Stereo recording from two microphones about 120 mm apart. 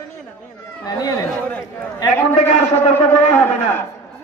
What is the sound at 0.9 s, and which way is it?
Speech, 35° left (ahead or behind).